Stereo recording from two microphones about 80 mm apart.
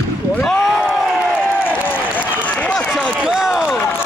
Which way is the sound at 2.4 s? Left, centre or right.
Centre.